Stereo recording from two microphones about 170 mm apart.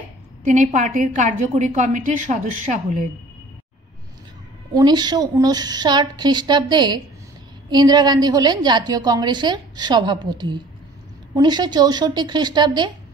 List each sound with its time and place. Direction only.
0.4 s a woman's voice: 45° right (ahead or behind)
4.7 s a woman's voice: 25° right (ahead or behind)